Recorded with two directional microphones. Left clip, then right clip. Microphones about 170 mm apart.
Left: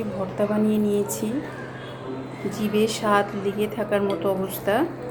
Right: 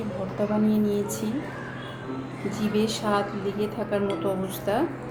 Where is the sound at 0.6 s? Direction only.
25° left (ahead or behind).